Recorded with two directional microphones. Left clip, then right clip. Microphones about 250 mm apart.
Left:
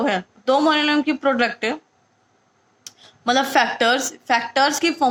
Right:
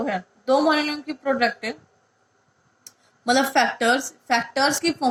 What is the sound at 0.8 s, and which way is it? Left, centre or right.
Speech, left.